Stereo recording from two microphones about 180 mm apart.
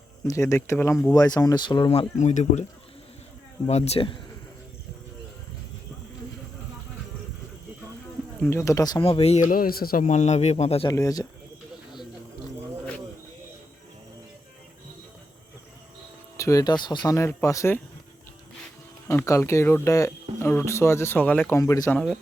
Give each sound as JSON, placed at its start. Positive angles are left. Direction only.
{"t": 0.3, "sound": "speech", "side_deg": 15}
{"t": 2.1, "sound": "speech", "side_deg": 40}
{"t": 3.7, "sound": "speech", "side_deg": 35}
{"t": 8.4, "sound": "speech", "side_deg": 15}
{"t": 10.8, "sound": "speech", "side_deg": 20}
{"t": 16.4, "sound": "speech", "side_deg": 20}
{"t": 19.0, "sound": "speech", "side_deg": 15}